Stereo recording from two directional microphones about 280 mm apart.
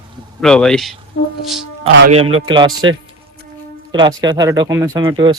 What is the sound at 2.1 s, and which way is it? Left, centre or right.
Speech, centre.